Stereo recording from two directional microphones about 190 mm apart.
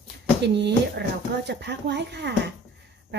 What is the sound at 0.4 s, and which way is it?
Speech, 65° right (ahead or behind).